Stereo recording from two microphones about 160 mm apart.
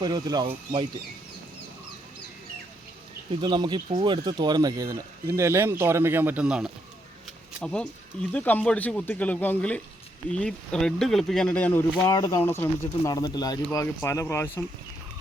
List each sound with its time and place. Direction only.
0.0 s speech: 25° right (ahead or behind)
3.4 s speech: 30° right (ahead or behind); by 12.0 s 10° left (ahead or behind)
12.0 s speech: 25° left (ahead or behind)
12.4 s speech: 15° left (ahead or behind)